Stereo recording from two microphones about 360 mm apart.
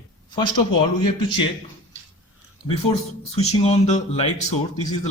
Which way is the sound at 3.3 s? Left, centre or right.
Centre.